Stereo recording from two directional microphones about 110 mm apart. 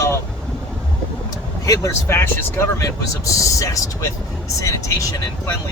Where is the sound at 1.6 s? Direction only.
30° left (ahead or behind).